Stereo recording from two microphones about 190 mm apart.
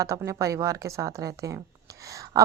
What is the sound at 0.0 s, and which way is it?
A woman's voice, 15° right (ahead or behind).